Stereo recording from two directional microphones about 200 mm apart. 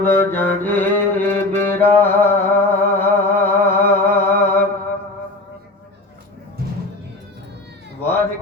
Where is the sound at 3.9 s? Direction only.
10° left (ahead or behind).